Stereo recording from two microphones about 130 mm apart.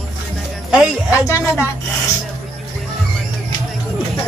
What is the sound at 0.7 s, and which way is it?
Speech, 5° right (ahead or behind).